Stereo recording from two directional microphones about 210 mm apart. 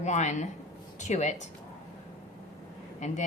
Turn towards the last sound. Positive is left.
turn(degrees=35)  # may be behind; listen again after turning